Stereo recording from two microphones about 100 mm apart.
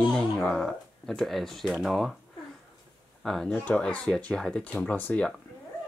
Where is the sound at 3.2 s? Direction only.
5° left (ahead or behind).